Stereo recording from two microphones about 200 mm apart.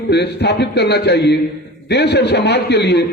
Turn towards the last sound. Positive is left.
turn(degrees=55)  # may be behind; listen again after turning